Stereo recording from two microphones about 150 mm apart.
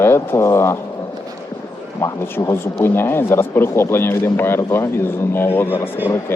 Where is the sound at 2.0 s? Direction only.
15° left (ahead or behind).